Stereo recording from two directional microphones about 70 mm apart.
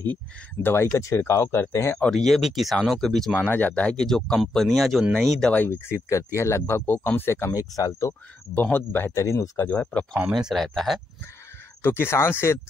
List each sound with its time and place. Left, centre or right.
0.0 s speech: left
0.9 s speech: left
2.0 s speech: centre
3.3 s speech: left; by 5.0 s centre
5.4 s speech: centre
5.7 s speech: left
7.5 s speech: left
8.7 s speech: left
9.1 s speech: left
9.7 s speech: centre
10.3 s speech: centre
11.8 s speech: left